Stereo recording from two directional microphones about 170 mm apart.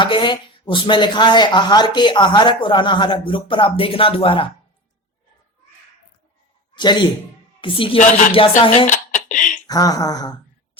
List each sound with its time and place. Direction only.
0.0 s speech: 30° left (ahead or behind)
6.7 s a man's voice: 25° left (ahead or behind)
8.9 s dishes: 50° left (ahead or behind)
9.6 s speech: 20° left (ahead or behind)